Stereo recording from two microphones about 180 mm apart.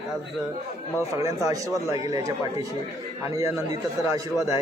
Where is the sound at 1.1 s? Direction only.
15° right (ahead or behind).